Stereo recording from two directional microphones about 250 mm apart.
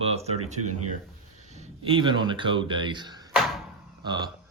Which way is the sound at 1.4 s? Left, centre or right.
Right.